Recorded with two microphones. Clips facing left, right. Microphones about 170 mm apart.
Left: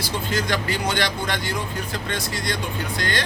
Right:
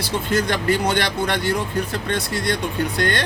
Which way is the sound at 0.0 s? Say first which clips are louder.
Right 4 dB; 55° right (ahead or behind).